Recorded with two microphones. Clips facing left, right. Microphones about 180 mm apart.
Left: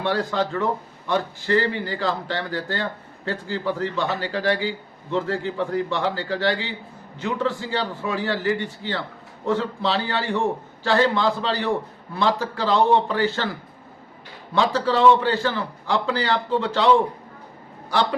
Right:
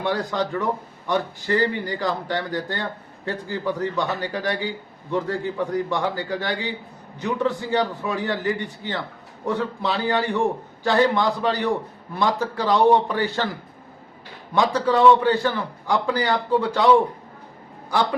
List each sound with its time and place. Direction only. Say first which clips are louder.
0.0 s a man's voice: left 1 dB; 15° right (ahead or behind)
14.5 s a man's voice: right 1 dB; 15° right (ahead or behind)